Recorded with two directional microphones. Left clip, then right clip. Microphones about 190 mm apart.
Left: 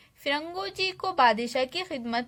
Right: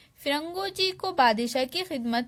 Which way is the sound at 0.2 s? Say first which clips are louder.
Right 1 dB; 25° right (ahead or behind).